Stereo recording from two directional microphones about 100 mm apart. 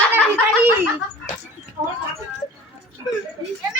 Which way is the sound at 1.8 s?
55° right (ahead or behind).